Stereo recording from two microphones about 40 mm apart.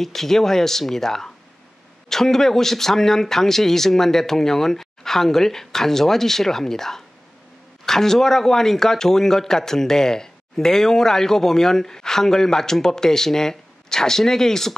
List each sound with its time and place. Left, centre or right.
0.0 s speech: centre